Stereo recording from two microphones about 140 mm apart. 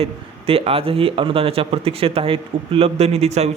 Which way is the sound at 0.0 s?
45° right (ahead or behind).